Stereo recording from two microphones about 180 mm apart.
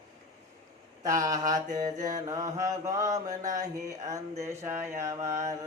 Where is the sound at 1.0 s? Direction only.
20° right (ahead or behind).